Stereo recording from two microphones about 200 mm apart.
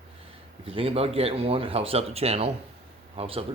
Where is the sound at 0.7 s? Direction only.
30° right (ahead or behind).